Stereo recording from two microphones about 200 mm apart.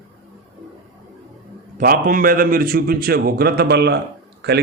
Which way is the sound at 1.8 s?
45° right (ahead or behind).